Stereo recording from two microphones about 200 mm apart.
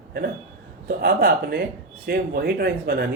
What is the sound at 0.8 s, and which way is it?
Speech, 50° right (ahead or behind).